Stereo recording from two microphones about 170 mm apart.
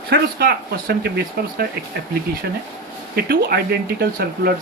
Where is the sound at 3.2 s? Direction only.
65° right (ahead or behind).